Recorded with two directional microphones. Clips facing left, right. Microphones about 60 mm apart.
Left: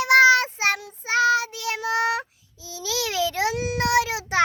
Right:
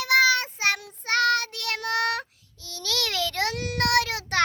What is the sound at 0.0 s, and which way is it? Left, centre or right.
Child singing, centre.